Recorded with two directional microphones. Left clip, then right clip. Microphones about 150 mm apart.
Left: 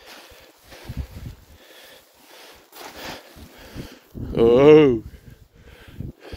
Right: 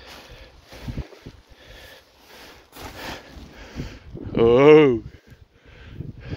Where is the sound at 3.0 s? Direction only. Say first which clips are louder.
Right 2 dB; 30° left (ahead or behind).